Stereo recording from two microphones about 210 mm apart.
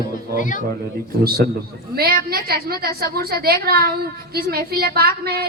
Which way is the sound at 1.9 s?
45° right (ahead or behind).